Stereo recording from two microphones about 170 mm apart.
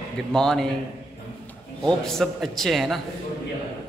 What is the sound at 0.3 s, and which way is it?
Speech, 5° left (ahead or behind).